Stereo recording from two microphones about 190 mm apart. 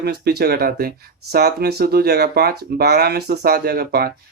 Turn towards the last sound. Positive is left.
turn(degrees=-55)  # may be behind; listen again after turning